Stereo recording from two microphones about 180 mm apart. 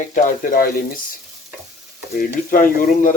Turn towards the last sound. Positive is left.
turn(degrees=50)  # may be behind; listen again after turning